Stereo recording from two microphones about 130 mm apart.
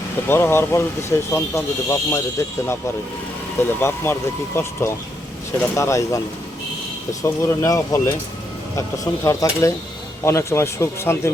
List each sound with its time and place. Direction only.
0.3 s speech: 20° left (ahead or behind)
3.6 s speech: 20° left (ahead or behind)
9.2 s speech: 25° left (ahead or behind)